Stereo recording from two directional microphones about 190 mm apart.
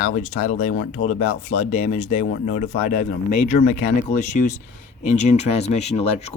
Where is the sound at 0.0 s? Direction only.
40° left (ahead or behind).